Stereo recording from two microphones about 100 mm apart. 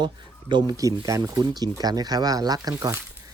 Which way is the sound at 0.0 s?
50° right (ahead or behind).